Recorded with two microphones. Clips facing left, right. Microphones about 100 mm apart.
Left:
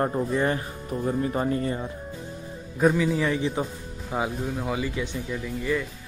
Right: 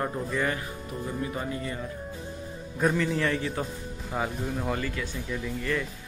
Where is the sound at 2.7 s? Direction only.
5° left (ahead or behind).